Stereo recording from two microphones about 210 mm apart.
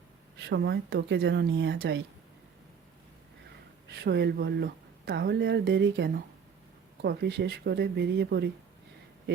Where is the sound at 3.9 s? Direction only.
55° right (ahead or behind).